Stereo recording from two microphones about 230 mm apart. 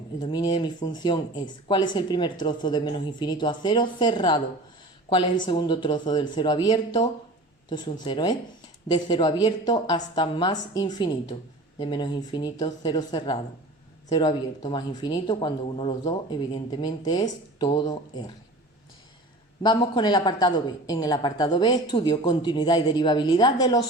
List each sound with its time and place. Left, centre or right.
0.2 s speech: centre
5.5 s speech: centre
19.6 s speech: centre